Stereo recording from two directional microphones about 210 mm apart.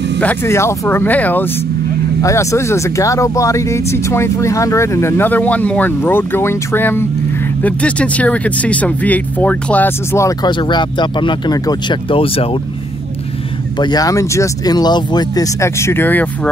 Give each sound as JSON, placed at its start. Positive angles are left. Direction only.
{"t": 0.2, "sound": "speech", "side_deg": 10}
{"t": 13.7, "sound": "speech", "side_deg": 20}